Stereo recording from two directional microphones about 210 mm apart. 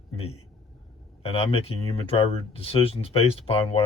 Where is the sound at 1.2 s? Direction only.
30° left (ahead or behind).